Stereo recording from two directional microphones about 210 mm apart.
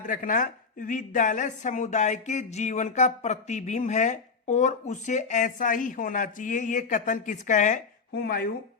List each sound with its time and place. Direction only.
0.1 s speech: 40° left (ahead or behind)